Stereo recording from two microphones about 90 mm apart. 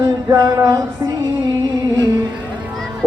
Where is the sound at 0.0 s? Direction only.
40° right (ahead or behind).